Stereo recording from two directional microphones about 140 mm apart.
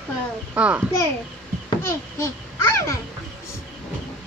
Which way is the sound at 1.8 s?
20° left (ahead or behind).